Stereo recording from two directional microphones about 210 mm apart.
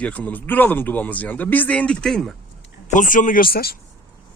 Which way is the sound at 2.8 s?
40° left (ahead or behind).